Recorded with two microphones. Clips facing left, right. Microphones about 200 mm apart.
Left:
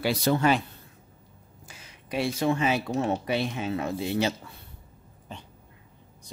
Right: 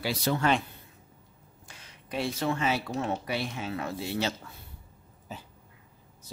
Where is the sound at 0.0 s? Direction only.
55° left (ahead or behind).